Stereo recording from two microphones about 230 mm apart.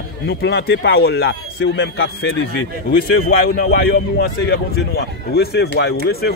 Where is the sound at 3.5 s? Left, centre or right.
Left.